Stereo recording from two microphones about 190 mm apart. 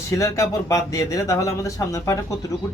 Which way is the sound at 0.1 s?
15° left (ahead or behind).